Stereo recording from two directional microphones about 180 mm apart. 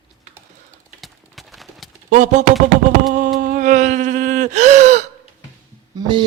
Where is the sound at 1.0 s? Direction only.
Centre (ahead or behind).